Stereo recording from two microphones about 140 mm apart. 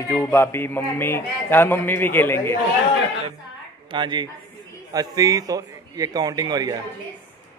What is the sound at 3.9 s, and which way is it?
A man's voice, 35° right (ahead or behind).